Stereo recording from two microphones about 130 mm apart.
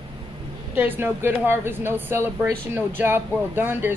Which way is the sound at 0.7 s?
15° right (ahead or behind).